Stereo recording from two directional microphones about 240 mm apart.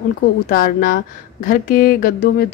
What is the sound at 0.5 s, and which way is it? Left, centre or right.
Speech, left.